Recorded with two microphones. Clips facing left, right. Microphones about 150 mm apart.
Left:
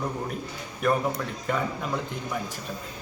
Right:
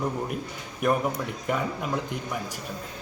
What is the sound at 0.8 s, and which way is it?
Speech, 15° right (ahead or behind).